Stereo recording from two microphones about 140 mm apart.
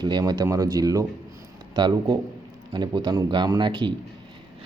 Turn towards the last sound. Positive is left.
turn(degrees=-35)  # may be behind; listen again after turning